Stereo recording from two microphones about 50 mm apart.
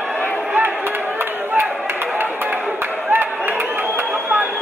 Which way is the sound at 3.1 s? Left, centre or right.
Right.